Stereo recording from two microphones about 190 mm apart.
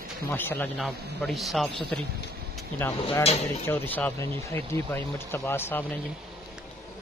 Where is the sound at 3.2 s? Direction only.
35° left (ahead or behind).